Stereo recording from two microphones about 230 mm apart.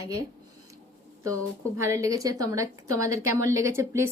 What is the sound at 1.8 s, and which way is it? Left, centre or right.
A woman's voice, centre.